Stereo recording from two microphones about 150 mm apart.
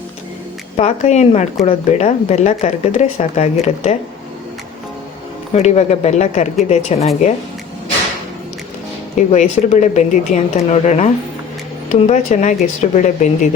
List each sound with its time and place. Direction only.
0.8 s speech: 45° left (ahead or behind)
5.5 s speech: 50° left (ahead or behind)
9.1 s speech: 50° left (ahead or behind)